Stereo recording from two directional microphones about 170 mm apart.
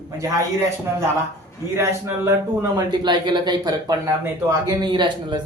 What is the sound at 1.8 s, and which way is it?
Speech, 15° right (ahead or behind).